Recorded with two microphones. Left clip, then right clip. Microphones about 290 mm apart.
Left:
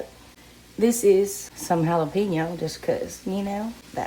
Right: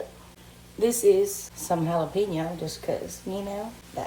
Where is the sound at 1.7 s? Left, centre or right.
Left.